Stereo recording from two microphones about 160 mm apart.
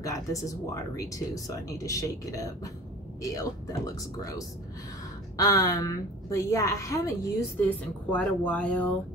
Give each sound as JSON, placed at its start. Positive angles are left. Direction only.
{"t": 0.0, "sound": "speech", "side_deg": 20}
{"t": 5.4, "sound": "speech", "side_deg": 20}